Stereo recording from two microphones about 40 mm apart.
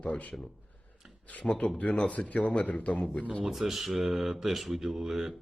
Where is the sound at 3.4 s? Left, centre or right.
Centre.